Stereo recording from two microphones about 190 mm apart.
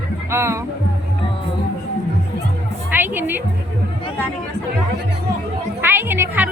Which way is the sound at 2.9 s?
10° right (ahead or behind).